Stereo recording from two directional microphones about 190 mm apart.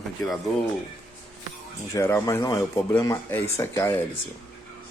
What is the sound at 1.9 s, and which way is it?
Speech, 15° left (ahead or behind).